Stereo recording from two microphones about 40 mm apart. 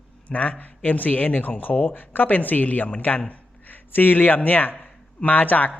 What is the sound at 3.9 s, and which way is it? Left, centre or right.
Speech, left.